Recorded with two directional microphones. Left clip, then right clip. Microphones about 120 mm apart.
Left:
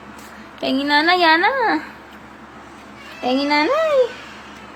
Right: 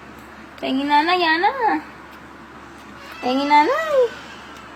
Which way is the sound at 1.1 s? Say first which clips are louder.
Left 3 dB; 90° left.